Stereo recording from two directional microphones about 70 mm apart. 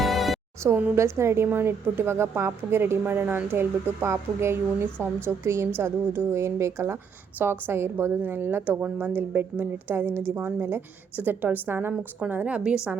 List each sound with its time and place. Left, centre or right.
0.0 s music: centre
0.9 s a woman's voice: right
7.3 s a woman's voice: right
12.2 s a woman's voice: centre